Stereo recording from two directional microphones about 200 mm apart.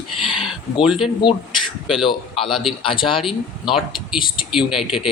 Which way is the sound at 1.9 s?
25° left (ahead or behind).